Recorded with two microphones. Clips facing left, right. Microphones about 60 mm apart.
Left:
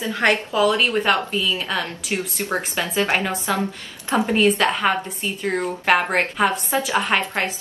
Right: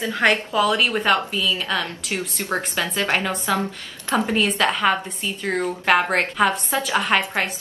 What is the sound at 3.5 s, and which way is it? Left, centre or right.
A woman's voice, centre.